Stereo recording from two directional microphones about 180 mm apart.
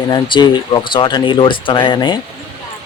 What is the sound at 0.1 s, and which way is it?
Speech, 25° left (ahead or behind).